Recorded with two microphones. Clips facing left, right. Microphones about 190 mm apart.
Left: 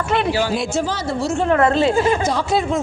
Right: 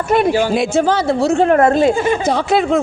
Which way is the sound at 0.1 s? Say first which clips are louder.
Right 6 dB; 45° right (ahead or behind).